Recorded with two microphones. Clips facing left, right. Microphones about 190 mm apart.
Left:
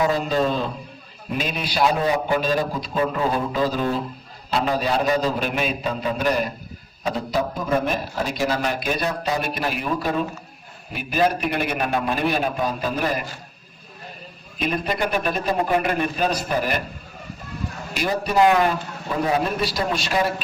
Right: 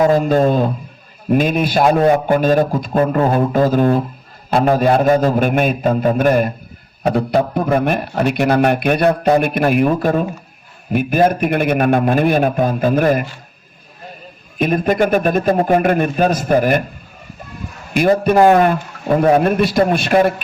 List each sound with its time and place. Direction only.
0.0 s a man's voice: 50° right (ahead or behind)
14.6 s a man's voice: 50° right (ahead or behind)
17.9 s a man's voice: 55° right (ahead or behind)